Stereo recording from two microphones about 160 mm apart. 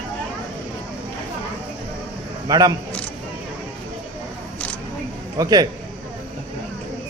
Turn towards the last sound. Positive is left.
turn(degrees=-25)  # may be behind; listen again after turning